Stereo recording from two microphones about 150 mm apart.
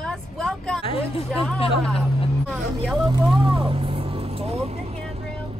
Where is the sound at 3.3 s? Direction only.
35° right (ahead or behind).